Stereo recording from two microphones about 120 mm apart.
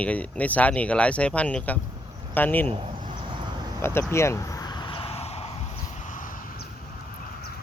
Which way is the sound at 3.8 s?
20° left (ahead or behind).